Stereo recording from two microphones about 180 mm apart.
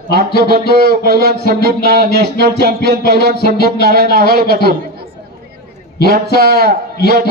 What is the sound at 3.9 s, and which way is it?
Speech, 60° right (ahead or behind).